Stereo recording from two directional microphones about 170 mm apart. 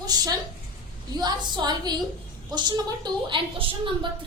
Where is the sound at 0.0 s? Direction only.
25° right (ahead or behind).